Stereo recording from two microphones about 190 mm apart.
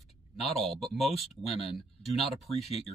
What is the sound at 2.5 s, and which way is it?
Speech, 30° left (ahead or behind).